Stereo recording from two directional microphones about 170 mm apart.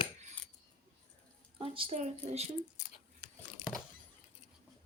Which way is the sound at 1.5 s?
35° right (ahead or behind).